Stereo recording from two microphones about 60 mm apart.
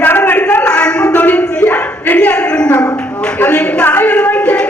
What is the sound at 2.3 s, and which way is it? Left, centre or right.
A woman's voice, centre.